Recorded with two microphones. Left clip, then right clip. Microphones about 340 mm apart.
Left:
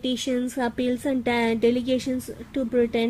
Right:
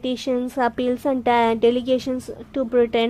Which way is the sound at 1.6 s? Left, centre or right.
Centre.